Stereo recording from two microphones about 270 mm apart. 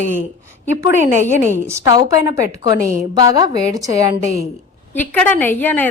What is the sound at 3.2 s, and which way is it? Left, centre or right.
Speech, centre.